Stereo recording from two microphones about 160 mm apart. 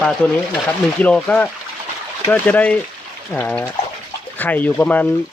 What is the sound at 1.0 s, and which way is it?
Speech, 10° left (ahead or behind).